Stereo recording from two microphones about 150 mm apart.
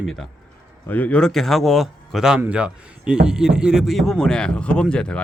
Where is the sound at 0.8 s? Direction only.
10° left (ahead or behind).